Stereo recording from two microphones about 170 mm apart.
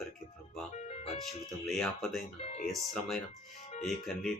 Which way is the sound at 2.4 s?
40° left (ahead or behind).